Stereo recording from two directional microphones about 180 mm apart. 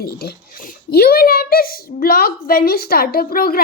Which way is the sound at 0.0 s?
60° left (ahead or behind).